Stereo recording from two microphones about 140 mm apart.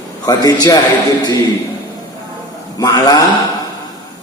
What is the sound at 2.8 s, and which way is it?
Speech, 25° left (ahead or behind).